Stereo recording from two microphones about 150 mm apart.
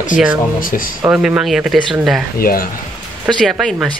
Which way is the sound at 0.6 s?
65° left (ahead or behind).